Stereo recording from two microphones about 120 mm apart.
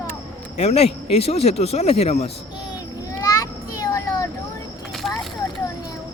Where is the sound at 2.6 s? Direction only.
30° left (ahead or behind).